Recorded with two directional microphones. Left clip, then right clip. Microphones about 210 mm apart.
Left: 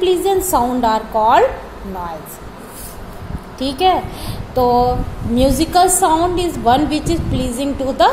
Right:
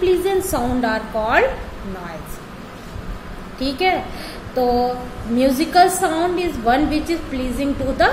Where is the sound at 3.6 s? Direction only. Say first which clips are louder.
Left 4 dB; 15° left (ahead or behind).